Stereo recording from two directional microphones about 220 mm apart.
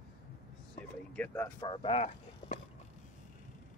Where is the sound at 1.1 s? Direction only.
10° left (ahead or behind).